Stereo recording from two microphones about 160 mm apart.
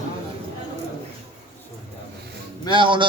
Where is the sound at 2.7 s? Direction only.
30° right (ahead or behind).